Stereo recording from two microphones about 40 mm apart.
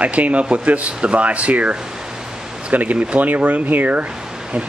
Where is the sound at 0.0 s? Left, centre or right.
Right.